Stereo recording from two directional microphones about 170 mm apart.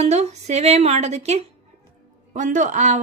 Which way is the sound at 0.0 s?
40° right (ahead or behind).